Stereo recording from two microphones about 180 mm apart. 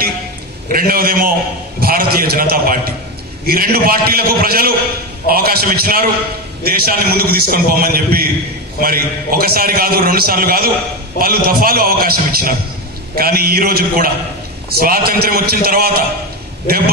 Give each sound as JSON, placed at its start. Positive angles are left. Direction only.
{"t": 0.7, "sound": "a man's voice", "side_deg": -55}